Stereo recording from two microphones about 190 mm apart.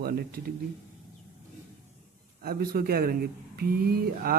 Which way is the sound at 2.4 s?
55° right (ahead or behind).